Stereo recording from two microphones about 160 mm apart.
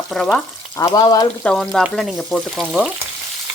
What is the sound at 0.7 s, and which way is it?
Frying, 25° left (ahead or behind).